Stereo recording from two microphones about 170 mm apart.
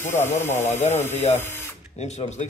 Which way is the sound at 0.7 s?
45° left (ahead or behind).